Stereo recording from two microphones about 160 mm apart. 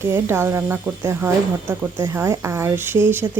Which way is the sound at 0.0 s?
15° right (ahead or behind).